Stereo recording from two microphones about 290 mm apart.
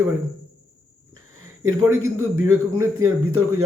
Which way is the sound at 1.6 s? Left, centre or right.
Right.